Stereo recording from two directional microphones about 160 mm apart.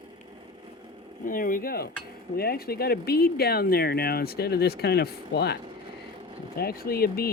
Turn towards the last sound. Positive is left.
turn(degrees=70)  # may be behind; listen again after turning